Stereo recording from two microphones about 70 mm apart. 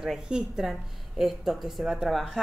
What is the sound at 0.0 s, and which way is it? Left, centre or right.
A woman's voice, centre.